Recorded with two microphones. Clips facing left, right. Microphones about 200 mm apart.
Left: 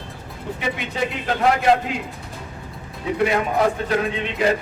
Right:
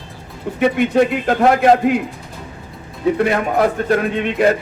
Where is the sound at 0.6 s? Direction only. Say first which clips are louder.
Right 12 dB; 55° right (ahead or behind).